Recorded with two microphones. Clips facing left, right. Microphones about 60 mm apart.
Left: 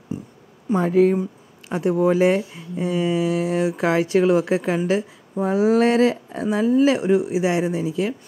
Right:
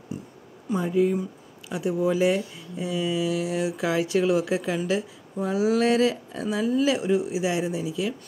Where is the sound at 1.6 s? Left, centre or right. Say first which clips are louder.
Left 6 dB; left.